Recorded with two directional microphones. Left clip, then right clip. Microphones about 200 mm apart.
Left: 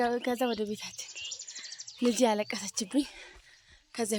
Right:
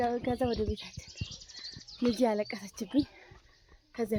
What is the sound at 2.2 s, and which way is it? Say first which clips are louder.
A woman's voice: left 3 dB; 5° left (ahead or behind).